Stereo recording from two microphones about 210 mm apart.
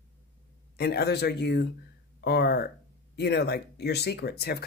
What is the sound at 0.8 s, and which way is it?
Speech, 50° left (ahead or behind).